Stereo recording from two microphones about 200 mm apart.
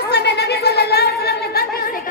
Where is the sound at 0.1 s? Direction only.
55° left (ahead or behind).